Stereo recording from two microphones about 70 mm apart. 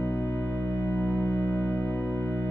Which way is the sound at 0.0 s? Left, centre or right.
Left.